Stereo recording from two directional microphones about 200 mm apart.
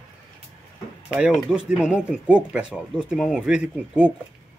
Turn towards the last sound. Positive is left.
turn(degrees=-5)  # may be behind; listen again after turning